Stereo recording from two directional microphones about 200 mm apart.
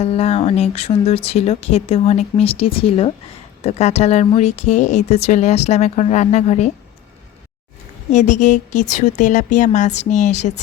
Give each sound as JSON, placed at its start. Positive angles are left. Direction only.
{"t": 0.0, "sound": "speech", "side_deg": 30}
{"t": 8.1, "sound": "speech", "side_deg": 35}